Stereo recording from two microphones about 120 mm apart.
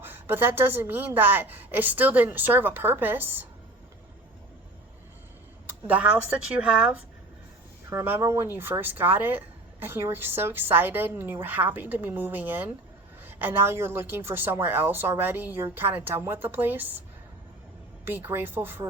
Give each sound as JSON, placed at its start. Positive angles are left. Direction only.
{"t": 0.0, "sound": "a woman's voice", "side_deg": -15}
{"t": 5.9, "sound": "a woman's voice", "side_deg": -10}
{"t": 7.9, "sound": "a woman's voice", "side_deg": -20}
{"t": 18.0, "sound": "a woman's voice", "side_deg": -15}